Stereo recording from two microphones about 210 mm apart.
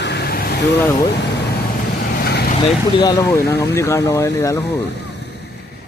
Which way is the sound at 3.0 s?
15° left (ahead or behind).